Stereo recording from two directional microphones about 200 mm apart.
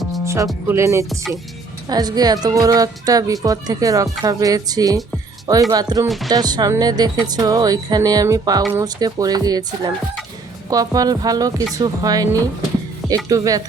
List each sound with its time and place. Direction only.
0.7 s speech: 15° right (ahead or behind)